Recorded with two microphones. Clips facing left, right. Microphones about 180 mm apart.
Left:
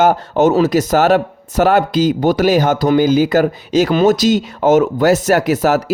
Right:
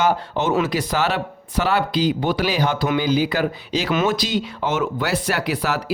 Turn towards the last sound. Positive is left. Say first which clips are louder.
# left 9 dB
turn(degrees=45)  # may be behind; listen again after turning